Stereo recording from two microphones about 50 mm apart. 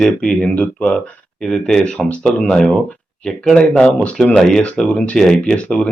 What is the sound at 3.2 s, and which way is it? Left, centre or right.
Speech, centre.